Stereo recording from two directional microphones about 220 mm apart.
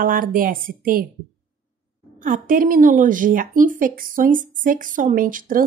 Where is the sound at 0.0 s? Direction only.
40° right (ahead or behind).